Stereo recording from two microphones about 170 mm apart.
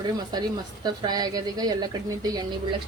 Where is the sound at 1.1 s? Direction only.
20° right (ahead or behind).